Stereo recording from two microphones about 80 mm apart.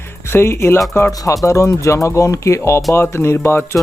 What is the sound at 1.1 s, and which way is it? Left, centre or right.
Speech, left.